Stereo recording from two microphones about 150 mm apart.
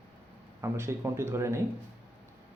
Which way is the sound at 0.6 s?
15° right (ahead or behind).